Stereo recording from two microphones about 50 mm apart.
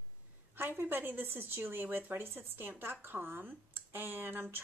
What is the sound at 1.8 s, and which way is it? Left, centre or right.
Speech, right.